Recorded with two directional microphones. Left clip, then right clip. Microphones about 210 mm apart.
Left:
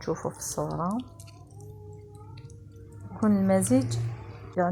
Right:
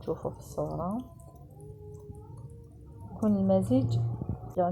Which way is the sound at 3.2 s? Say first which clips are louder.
Left 2 dB; 25° left (ahead or behind).